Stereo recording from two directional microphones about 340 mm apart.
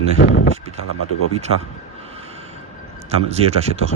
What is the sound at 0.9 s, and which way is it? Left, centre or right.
Speech, left.